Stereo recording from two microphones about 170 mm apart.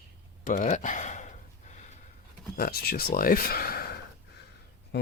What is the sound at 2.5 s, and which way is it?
Speech, 60° left (ahead or behind).